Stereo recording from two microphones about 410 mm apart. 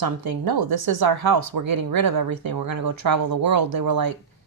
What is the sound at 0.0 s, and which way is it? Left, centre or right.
A woman's voice, right.